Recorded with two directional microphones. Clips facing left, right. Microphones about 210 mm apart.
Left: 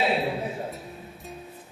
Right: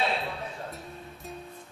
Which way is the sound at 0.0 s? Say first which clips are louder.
Left 5 dB; 10° left (ahead or behind).